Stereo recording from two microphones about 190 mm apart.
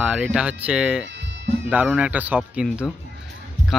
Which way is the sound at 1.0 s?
70° right (ahead or behind).